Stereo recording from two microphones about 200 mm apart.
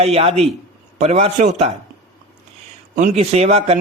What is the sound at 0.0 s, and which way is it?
A man's voice, 30° right (ahead or behind).